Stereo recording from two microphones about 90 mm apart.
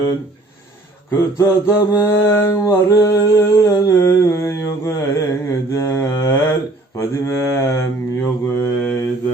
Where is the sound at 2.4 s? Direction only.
35° left (ahead or behind).